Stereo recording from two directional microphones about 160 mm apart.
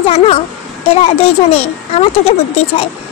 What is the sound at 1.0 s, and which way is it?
A woman's voice, 40° left (ahead or behind).